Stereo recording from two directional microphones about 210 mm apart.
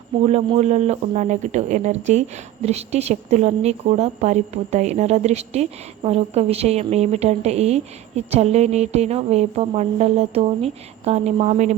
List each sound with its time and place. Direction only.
0.2 s a woman's voice: 30° right (ahead or behind)